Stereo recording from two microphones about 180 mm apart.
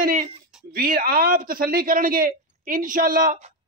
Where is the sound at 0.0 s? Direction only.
50° right (ahead or behind).